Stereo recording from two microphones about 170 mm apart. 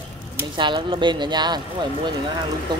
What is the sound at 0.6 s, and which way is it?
Speech, 30° right (ahead or behind).